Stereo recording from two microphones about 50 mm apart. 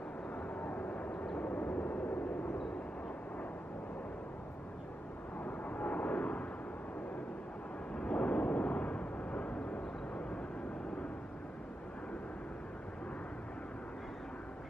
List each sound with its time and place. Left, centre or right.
0.6 s vehicle: left
1.2 s vehicle: left
1.5 s vehicle: left
5.4 s vehicle: left
7.9 s a sound: left